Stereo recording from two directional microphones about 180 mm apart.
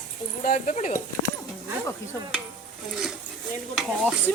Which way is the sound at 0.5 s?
40° left (ahead or behind).